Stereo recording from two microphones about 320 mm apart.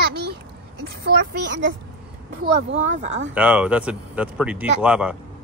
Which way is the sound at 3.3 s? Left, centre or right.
Centre.